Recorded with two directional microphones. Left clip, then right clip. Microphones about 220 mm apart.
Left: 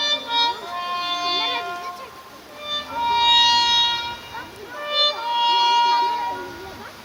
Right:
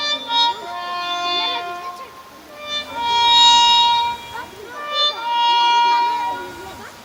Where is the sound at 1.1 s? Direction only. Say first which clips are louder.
Right 3 dB; 30° right (ahead or behind).